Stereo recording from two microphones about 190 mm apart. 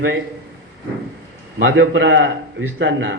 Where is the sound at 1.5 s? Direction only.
90° right.